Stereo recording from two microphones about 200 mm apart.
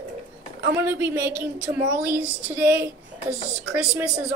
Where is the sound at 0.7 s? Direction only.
10° right (ahead or behind).